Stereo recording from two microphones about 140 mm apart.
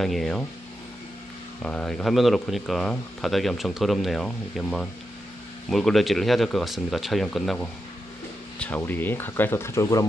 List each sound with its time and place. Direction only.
0.0 s speech: centre (ahead or behind)
1.6 s speech: 5° left (ahead or behind); by 10.0 s 25° left (ahead or behind)